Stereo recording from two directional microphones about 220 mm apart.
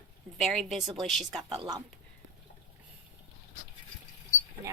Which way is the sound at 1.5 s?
20° right (ahead or behind).